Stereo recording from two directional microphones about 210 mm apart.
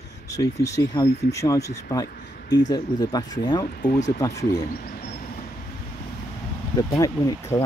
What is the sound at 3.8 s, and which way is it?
Speech, 35° left (ahead or behind).